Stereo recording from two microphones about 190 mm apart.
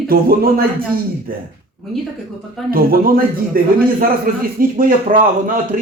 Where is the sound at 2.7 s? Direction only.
50° right (ahead or behind).